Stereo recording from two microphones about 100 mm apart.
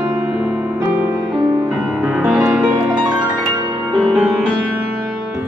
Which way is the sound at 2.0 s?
5° right (ahead or behind).